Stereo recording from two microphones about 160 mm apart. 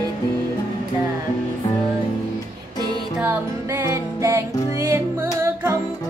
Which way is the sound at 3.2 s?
15° right (ahead or behind).